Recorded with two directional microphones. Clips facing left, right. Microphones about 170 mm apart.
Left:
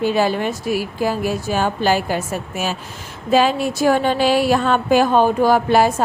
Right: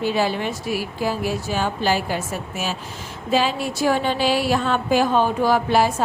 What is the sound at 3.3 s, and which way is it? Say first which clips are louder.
Speech: left 5 dB; 50° left (ahead or behind).